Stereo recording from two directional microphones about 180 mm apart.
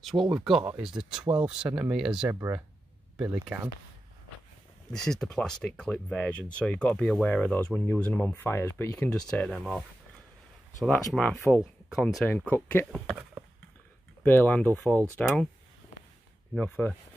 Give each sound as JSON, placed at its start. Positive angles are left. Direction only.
{"t": 0.1, "sound": "speech", "side_deg": -20}
{"t": 0.7, "sound": "speech", "side_deg": -5}
{"t": 2.2, "sound": "speech", "side_deg": -15}
{"t": 5.0, "sound": "speech", "side_deg": 0}
{"t": 14.2, "sound": "speech", "side_deg": 10}
{"t": 16.5, "sound": "speech", "side_deg": 10}